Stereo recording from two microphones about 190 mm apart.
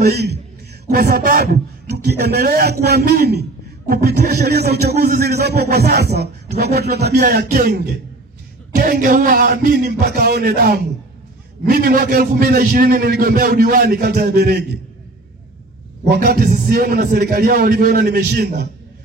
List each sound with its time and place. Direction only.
0.0 s a man's voice: 60° right (ahead or behind)
16.1 s a man's voice: 55° right (ahead or behind)